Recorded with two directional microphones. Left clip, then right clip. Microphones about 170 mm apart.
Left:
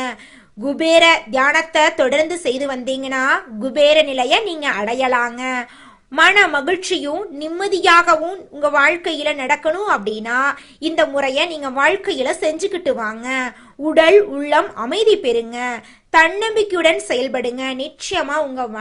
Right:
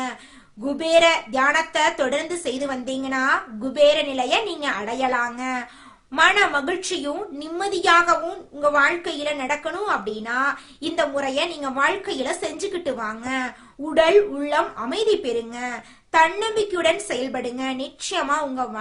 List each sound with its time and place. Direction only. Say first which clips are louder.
0.6 s a woman's voice: left 5 dB; 25° left (ahead or behind)